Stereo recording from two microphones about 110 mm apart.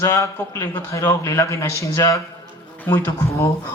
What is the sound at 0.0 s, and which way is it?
A man's voice, 25° left (ahead or behind).